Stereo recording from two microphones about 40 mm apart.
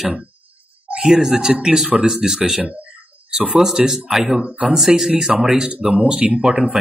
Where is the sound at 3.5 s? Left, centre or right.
Centre.